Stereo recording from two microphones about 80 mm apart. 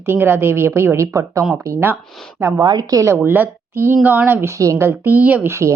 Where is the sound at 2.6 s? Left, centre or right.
Right.